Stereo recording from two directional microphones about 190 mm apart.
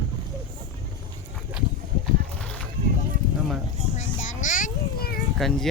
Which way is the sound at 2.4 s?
5° left (ahead or behind).